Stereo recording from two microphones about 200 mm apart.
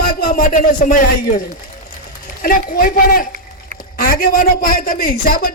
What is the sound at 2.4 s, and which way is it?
A woman's voice, 45° left (ahead or behind).